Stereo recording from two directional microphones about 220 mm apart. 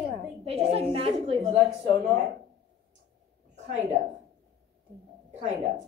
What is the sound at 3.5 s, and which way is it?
Speech, 30° right (ahead or behind).